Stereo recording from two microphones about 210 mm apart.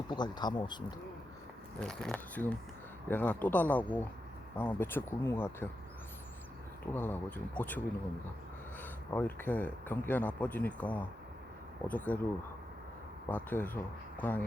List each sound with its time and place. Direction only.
0.1 s speech: 20° left (ahead or behind)
1.8 s speech: 5° left (ahead or behind)
6.8 s speech: 10° left (ahead or behind)
8.8 s speech: 10° left (ahead or behind)
13.2 s speech: 10° left (ahead or behind)